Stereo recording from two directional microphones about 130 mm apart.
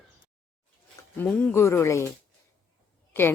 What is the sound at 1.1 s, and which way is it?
Speech, 15° left (ahead or behind).